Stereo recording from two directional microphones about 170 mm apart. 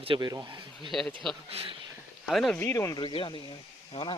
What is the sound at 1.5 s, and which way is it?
Speech, 35° right (ahead or behind).